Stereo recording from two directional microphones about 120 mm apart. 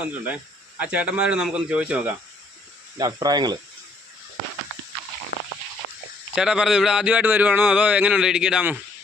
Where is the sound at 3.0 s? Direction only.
35° right (ahead or behind).